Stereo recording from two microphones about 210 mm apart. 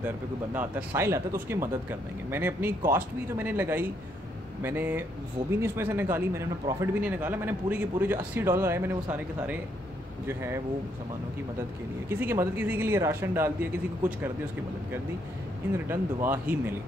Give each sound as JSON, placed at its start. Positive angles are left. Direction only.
{"t": 0.6, "sound": "speech", "side_deg": -10}
{"t": 12.1, "sound": "speech", "side_deg": -10}
{"t": 15.9, "sound": "speech", "side_deg": -10}